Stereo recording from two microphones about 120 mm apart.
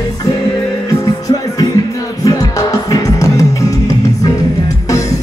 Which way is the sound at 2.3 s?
30° left (ahead or behind).